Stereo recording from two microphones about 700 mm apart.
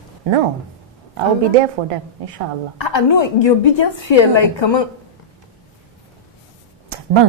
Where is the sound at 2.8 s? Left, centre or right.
Left.